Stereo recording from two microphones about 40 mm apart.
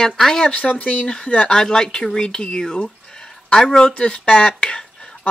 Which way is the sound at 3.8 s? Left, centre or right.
Left.